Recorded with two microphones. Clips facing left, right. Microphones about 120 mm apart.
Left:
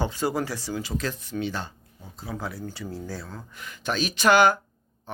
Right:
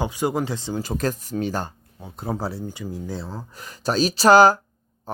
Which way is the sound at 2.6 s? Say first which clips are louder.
Right 3 dB; 15° right (ahead or behind).